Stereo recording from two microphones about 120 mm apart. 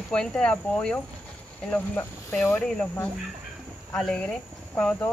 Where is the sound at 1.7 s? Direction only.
20° left (ahead or behind).